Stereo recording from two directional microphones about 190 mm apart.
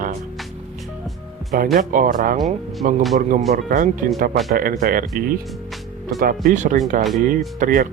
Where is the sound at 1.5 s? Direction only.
50° right (ahead or behind).